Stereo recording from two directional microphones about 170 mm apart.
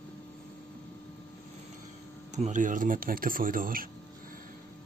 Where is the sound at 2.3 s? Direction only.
45° right (ahead or behind).